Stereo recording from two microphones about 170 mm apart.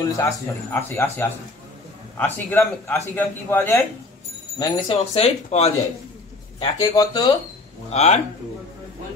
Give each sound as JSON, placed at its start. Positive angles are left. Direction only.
{"t": 0.0, "sound": "speech", "side_deg": 15}
{"t": 4.6, "sound": "speech", "side_deg": 30}
{"t": 6.6, "sound": "speech", "side_deg": 25}
{"t": 7.9, "sound": "speech", "side_deg": 40}